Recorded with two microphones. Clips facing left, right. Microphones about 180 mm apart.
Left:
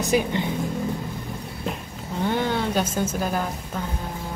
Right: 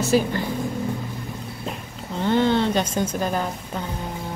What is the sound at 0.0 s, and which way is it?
Speech, 15° left (ahead or behind).